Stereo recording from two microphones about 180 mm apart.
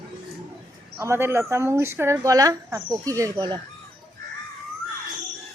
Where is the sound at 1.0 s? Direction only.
15° right (ahead or behind).